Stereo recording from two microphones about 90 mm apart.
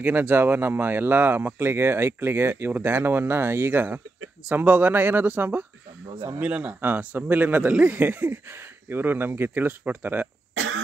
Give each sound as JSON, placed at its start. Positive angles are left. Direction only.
{"t": 0.0, "sound": "speech", "side_deg": -20}